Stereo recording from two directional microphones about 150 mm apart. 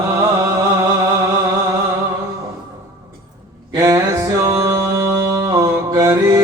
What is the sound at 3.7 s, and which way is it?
Music, 20° right (ahead or behind).